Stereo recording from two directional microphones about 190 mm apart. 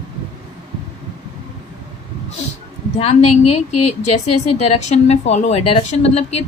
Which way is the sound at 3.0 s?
35° left (ahead or behind).